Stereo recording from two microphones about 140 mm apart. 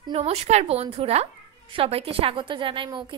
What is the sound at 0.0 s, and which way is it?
A woman's voice, 45° right (ahead or behind).